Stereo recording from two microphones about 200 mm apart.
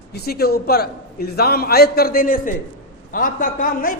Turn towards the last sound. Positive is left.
turn(degrees=45)  # may be behind; listen again after turning